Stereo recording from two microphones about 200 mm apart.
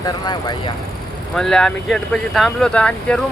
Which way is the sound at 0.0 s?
20° left (ahead or behind).